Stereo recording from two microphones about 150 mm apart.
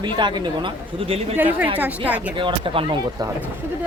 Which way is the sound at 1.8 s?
10° right (ahead or behind).